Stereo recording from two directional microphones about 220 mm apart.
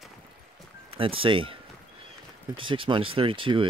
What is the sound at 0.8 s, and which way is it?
Speech, 25° right (ahead or behind).